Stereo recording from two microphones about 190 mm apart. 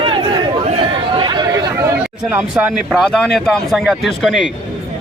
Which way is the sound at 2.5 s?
Centre (ahead or behind).